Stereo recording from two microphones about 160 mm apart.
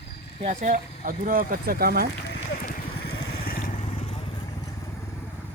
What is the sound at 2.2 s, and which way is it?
Vehicle, 90° left.